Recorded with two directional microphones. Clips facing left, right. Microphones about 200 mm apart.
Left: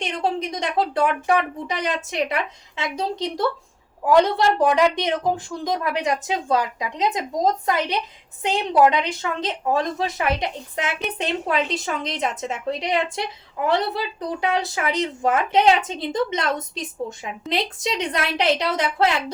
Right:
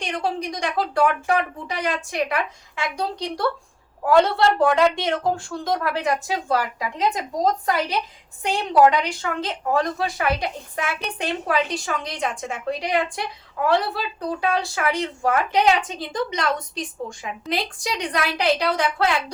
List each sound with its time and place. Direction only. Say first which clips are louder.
0.0 s a woman's voice: left 1 dB; 20° left (ahead or behind)